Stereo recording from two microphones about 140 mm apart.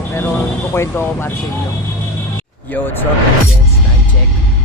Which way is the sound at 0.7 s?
15° left (ahead or behind).